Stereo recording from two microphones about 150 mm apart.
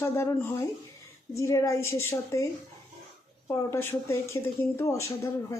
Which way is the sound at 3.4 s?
15° left (ahead or behind).